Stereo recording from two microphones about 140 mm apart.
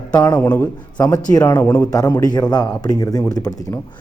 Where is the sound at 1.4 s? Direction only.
15° left (ahead or behind).